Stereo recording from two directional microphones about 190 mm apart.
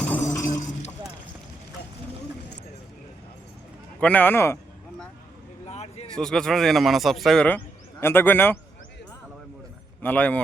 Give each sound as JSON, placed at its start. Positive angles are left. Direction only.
{"t": 0.0, "sound": "chink", "side_deg": 10}
{"t": 0.5, "sound": "a sound", "side_deg": 40}
{"t": 4.0, "sound": "speech", "side_deg": 10}
{"t": 5.6, "sound": "a sound", "side_deg": 35}
{"t": 6.1, "sound": "speech", "side_deg": 5}
{"t": 10.0, "sound": "speech", "side_deg": 10}